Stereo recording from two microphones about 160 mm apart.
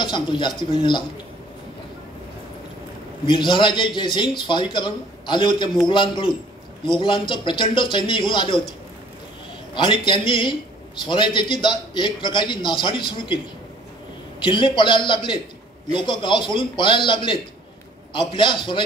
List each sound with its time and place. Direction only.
0.0 s a man's voice: 30° left (ahead or behind)
3.3 s a man's voice: 30° left (ahead or behind)
9.8 s a man's voice: 30° left (ahead or behind)
14.4 s a man's voice: 30° left (ahead or behind)